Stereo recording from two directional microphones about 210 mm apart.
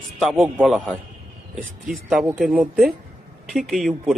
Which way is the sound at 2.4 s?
Centre (ahead or behind).